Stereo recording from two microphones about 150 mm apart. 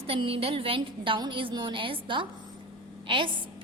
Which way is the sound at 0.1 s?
40° right (ahead or behind).